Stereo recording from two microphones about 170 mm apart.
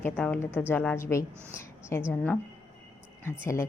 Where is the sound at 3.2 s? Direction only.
15° left (ahead or behind).